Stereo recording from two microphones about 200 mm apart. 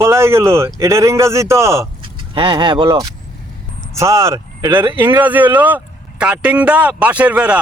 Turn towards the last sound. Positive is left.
turn(degrees=-5)  # may be behind; listen again after turning